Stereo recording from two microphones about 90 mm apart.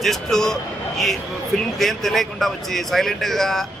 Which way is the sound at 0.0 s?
5° left (ahead or behind).